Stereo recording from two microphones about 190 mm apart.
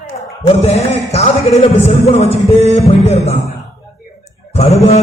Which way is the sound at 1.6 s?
35° left (ahead or behind).